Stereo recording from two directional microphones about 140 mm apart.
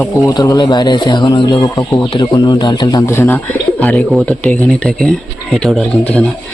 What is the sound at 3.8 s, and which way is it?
Speech, 10° left (ahead or behind).